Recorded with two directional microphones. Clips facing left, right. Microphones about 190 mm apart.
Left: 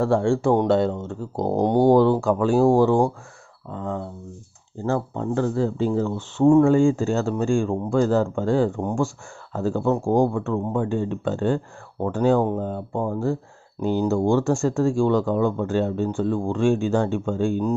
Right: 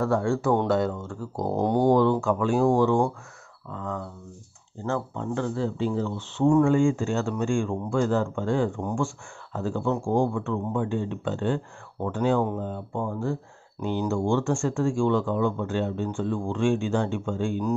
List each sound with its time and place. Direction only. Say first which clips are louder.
0.0 s speech: left 4 dB; 30° left (ahead or behind)
1.9 s speech: left 4 dB; 35° left (ahead or behind)
6.5 s speech: left 4 dB; 35° left (ahead or behind)